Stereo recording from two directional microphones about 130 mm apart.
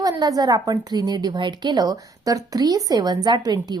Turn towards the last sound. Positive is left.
turn(degrees=-30)  # may be behind; listen again after turning